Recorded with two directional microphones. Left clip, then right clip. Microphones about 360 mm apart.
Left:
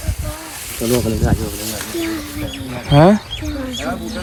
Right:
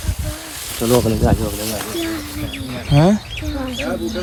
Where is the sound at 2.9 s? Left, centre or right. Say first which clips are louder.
Left 5 dB; centre.